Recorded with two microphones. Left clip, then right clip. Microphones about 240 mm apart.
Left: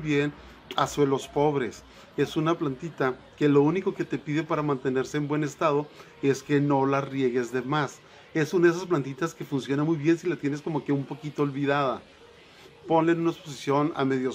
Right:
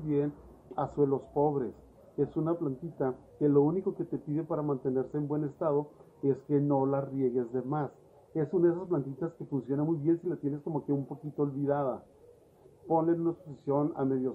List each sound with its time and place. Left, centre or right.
0.7 s a man's voice: left